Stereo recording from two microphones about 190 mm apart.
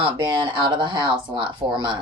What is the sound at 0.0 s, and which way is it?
Speech, 25° right (ahead or behind).